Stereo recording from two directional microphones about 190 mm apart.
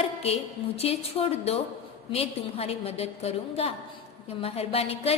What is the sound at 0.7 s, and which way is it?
A woman's voice, 30° left (ahead or behind).